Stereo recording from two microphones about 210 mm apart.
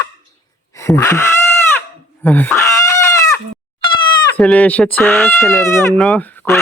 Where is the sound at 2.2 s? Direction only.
10° left (ahead or behind).